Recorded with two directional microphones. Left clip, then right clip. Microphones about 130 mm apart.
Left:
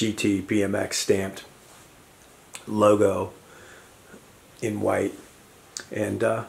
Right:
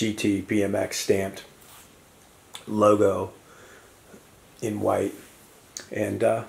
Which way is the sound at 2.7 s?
5° left (ahead or behind).